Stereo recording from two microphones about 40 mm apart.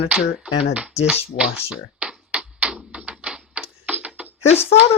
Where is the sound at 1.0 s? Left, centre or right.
Centre; by 4.3 s right.